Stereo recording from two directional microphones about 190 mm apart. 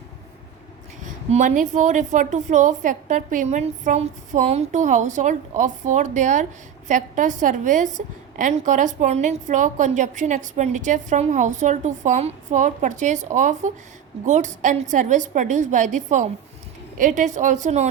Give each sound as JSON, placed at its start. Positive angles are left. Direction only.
{"t": 1.3, "sound": "a woman's voice", "side_deg": -40}